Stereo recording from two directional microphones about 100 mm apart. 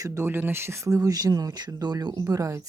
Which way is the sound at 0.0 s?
30° right (ahead or behind).